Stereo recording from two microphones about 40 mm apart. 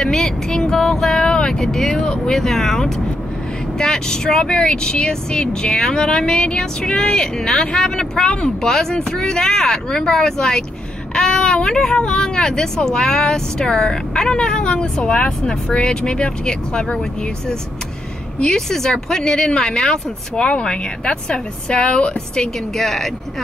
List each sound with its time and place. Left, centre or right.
0.0 s a sound: centre
1.2 s vehicle: centre
2.0 s speech: centre
18.4 s speech: centre
20.3 s speech: left
22.8 s speech: centre